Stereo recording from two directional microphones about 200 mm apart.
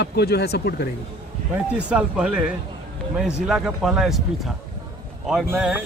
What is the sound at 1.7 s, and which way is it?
Speech, 5° right (ahead or behind).